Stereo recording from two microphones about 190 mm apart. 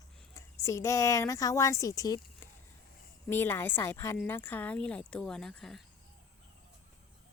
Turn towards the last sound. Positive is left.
turn(degrees=0)  # may be behind; listen again after turning